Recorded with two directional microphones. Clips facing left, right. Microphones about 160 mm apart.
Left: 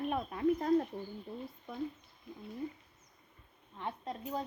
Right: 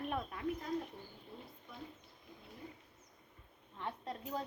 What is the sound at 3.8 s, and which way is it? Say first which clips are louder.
Speech: left 3 dB; 10° left (ahead or behind).